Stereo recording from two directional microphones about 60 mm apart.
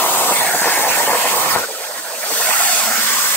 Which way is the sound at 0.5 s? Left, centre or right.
Left.